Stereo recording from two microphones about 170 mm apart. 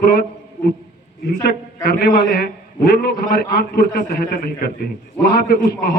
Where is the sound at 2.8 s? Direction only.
65° left (ahead or behind).